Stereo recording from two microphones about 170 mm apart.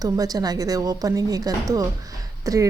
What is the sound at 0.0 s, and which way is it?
A woman's voice, 20° right (ahead or behind).